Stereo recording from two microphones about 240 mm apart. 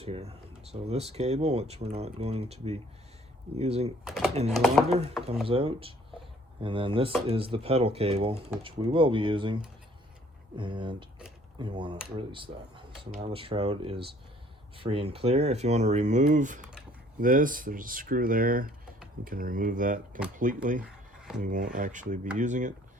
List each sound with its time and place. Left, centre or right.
0.0 s speech: right
4.0 s speech: centre
5.5 s speech: right
10.6 s speech: centre
20.8 s a sound: centre
21.4 s speech: right